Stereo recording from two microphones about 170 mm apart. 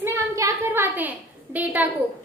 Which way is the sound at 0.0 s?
15° right (ahead or behind).